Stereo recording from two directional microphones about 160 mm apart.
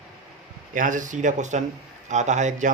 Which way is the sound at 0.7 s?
55° right (ahead or behind).